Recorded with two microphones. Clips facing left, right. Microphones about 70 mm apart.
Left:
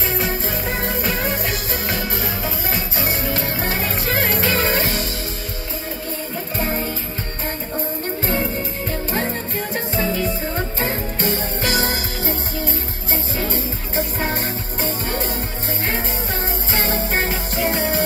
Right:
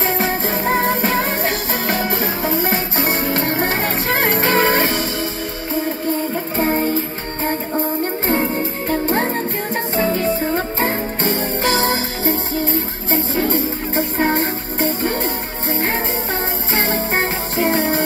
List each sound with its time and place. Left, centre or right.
0.0 s music: right
6.5 s music: right
9.0 s music: right
16.7 s music: right